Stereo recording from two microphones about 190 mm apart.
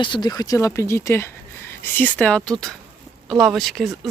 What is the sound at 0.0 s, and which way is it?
Speech, 25° left (ahead or behind).